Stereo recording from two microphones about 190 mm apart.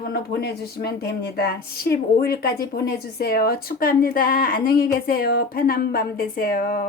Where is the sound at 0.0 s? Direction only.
55° left (ahead or behind).